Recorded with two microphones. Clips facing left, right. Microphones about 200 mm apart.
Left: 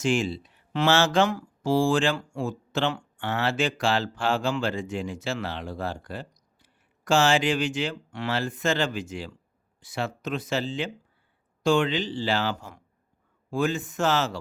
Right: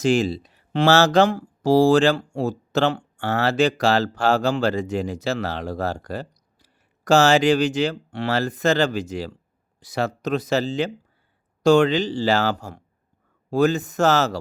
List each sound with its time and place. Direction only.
0.0 s speech: 35° right (ahead or behind)